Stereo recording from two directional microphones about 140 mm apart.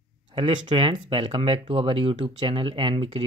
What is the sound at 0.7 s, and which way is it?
Speech, 40° right (ahead or behind).